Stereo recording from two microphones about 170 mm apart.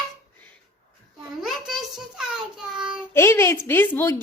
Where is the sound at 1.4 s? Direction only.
Centre (ahead or behind).